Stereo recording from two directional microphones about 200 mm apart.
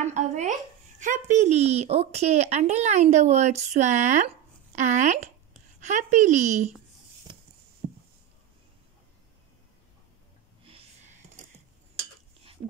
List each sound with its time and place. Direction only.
0.0 s speech: 35° right (ahead or behind)
10.7 s whispering: 35° right (ahead or behind)